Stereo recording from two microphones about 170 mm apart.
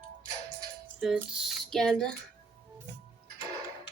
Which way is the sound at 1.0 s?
5° right (ahead or behind).